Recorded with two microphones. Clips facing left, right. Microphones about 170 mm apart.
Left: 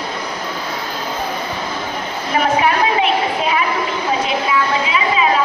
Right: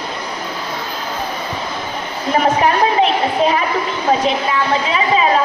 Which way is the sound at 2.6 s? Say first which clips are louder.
Right 2 dB; 40° right (ahead or behind).